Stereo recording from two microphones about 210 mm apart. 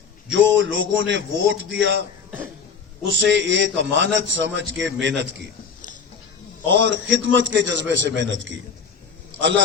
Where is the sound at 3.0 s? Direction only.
60° right (ahead or behind).